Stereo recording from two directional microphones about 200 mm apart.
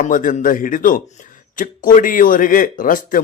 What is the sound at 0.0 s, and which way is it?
Speech, 40° left (ahead or behind).